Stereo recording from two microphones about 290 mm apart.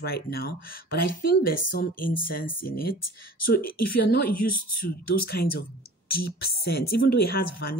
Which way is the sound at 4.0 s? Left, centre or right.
Left.